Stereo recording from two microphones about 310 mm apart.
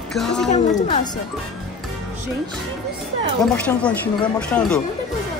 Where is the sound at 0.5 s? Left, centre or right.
Centre.